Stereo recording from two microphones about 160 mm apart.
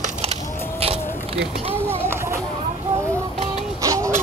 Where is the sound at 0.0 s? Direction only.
40° right (ahead or behind).